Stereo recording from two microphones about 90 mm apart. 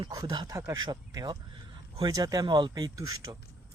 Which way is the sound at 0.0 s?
50° right (ahead or behind).